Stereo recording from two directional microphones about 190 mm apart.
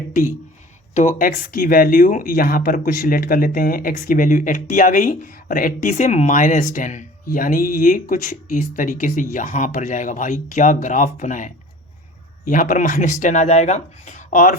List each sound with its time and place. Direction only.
0.1 s speech: 45° left (ahead or behind)